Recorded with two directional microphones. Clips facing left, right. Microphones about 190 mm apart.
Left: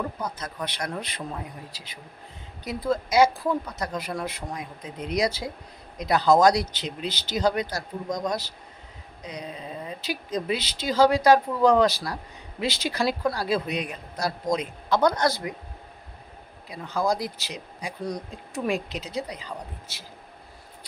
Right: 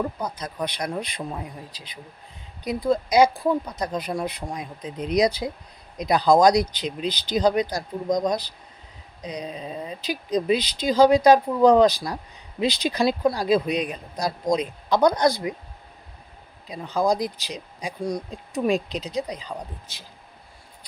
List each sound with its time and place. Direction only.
0.2 s speech: 15° right (ahead or behind)
16.6 s speech: 20° right (ahead or behind)